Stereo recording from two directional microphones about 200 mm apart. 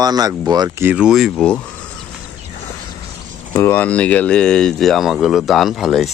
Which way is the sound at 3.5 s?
10° left (ahead or behind).